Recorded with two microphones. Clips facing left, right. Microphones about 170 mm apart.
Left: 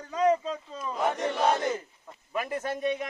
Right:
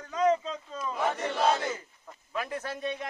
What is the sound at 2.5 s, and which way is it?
Speech, 50° left (ahead or behind).